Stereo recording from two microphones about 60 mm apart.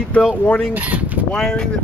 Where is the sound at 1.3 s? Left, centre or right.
Centre.